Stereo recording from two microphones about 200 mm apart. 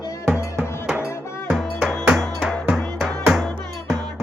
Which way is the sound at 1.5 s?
Centre (ahead or behind).